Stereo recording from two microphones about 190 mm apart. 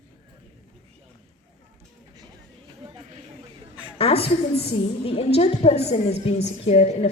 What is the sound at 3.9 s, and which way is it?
A woman's voice, 30° left (ahead or behind).